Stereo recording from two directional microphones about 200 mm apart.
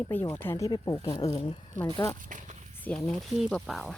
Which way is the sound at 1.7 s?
40° right (ahead or behind).